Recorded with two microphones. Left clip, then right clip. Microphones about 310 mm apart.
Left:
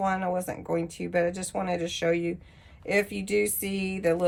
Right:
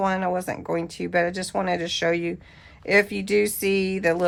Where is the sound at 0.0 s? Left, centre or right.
Right.